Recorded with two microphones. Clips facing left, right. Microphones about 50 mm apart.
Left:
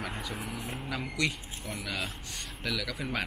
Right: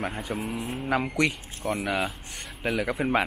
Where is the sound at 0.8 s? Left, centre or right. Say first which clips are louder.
Right 8 dB; right.